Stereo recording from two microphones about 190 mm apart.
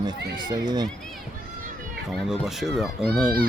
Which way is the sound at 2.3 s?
Centre (ahead or behind).